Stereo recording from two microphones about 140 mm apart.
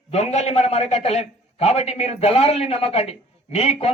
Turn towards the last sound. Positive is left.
turn(degrees=50)  # may be behind; listen again after turning